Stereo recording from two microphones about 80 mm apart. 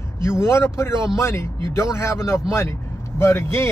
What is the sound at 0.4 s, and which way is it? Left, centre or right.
Speech, left.